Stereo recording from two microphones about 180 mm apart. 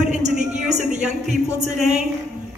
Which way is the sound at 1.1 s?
Centre (ahead or behind).